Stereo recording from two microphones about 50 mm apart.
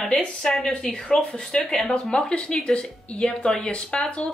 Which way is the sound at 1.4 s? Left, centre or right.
Centre.